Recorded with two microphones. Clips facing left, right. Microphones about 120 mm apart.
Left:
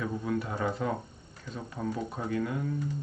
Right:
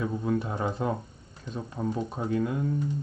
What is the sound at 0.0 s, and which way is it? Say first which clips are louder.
Speech: right 3 dB; 25° right (ahead or behind).